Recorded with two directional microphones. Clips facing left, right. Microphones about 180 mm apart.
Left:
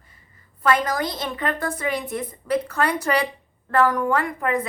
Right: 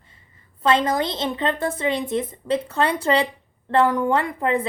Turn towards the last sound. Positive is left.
turn(degrees=-30)  # may be behind; listen again after turning